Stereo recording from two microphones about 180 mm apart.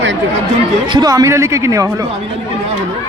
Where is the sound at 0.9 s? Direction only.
20° right (ahead or behind).